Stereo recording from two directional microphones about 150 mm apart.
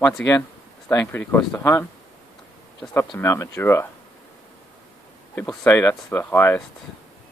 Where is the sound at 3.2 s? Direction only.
15° left (ahead or behind).